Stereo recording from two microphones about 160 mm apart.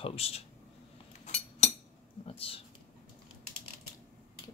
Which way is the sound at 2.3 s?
35° left (ahead or behind).